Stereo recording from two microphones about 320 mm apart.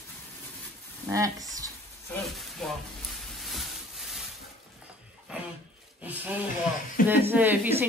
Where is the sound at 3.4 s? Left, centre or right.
Centre.